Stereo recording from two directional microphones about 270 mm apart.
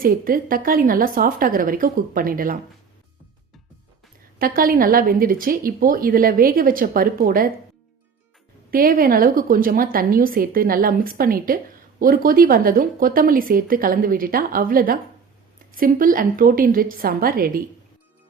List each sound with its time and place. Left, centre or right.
0.0 s a woman's voice: right
4.4 s a woman's voice: right
8.7 s a woman's voice: right